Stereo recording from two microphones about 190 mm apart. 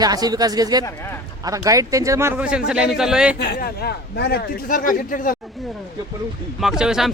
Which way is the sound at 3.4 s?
55° left (ahead or behind).